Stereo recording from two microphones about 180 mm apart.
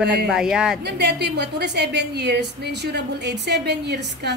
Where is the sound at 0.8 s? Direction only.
70° right (ahead or behind).